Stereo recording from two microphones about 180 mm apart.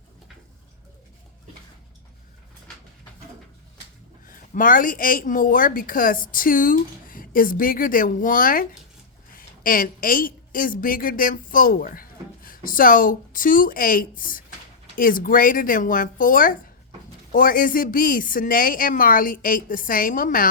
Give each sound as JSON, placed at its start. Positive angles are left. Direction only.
{"t": 4.3, "sound": "a woman's voice", "side_deg": 50}